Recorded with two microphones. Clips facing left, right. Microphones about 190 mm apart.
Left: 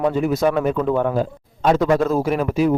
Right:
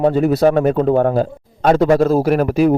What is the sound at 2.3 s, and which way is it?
Speech, 65° right (ahead or behind).